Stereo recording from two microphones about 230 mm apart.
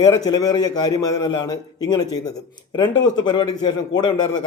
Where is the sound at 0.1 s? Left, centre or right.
Centre.